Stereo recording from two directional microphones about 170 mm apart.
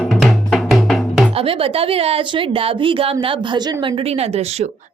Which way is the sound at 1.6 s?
35° right (ahead or behind).